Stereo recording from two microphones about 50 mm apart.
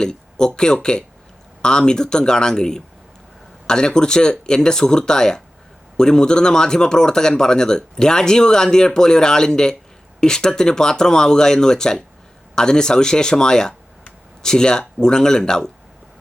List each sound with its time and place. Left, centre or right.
0.0 s speech: centre